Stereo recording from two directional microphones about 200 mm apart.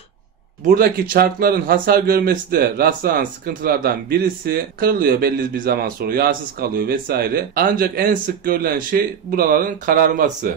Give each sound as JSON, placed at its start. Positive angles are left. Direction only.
{"t": 0.7, "sound": "speech", "side_deg": -45}